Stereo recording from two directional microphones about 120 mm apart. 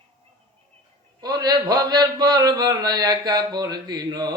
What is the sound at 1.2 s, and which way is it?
A man's voice, 35° right (ahead or behind).